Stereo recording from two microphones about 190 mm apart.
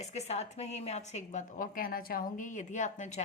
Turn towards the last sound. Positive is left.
turn(degrees=40)  # may be behind; listen again after turning